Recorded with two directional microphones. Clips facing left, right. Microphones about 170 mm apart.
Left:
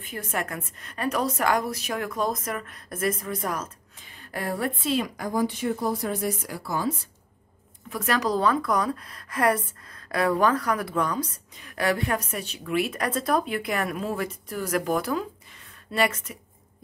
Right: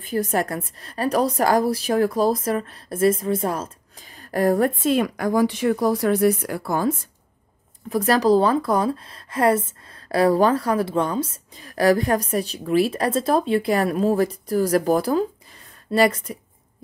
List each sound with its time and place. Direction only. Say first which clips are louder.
0.0 s a woman's voice: right 9 dB; 35° right (ahead or behind)
4.2 s a woman's voice: right 10 dB; 40° right (ahead or behind)
7.9 s a woman's voice: right 8 dB; 35° right (ahead or behind)